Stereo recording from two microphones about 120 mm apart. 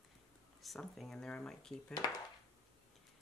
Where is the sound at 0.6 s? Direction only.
Centre (ahead or behind).